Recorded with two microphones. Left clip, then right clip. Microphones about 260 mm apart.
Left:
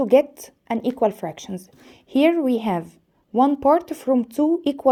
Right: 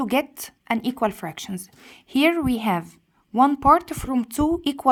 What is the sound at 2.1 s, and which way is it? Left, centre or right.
Speech, right.